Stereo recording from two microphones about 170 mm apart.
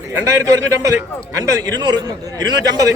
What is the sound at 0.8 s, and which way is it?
A man's voice, 20° right (ahead or behind).